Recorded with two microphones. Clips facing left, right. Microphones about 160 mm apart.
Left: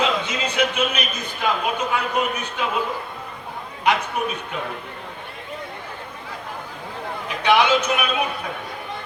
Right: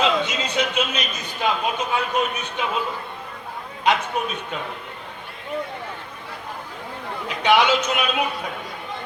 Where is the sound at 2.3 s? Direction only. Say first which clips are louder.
Left 1 dB; 20° right (ahead or behind).